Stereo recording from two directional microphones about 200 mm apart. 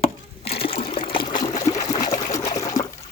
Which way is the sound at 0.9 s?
25° left (ahead or behind).